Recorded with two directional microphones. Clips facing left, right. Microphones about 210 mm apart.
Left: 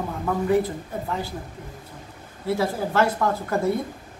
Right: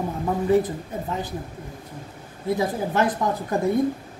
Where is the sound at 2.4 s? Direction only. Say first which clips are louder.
Even; 20° right (ahead or behind).